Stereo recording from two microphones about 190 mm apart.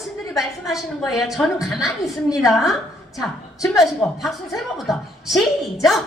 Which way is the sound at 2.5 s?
Centre (ahead or behind).